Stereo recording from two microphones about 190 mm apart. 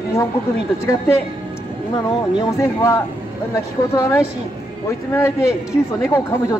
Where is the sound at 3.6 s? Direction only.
15° left (ahead or behind).